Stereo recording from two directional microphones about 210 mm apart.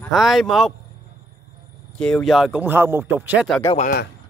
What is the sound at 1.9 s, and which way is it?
Speech, 5° left (ahead or behind).